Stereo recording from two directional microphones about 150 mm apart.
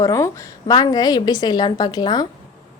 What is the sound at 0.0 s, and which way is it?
A woman's voice, 20° left (ahead or behind).